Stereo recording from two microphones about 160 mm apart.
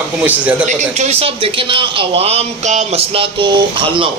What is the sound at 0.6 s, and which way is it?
A man's voice, 45° right (ahead or behind).